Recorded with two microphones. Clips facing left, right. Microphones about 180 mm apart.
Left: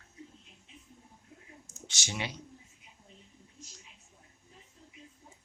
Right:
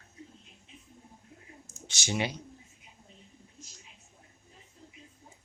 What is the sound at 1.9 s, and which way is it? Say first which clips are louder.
Speech: right 6 dB; 10° right (ahead or behind).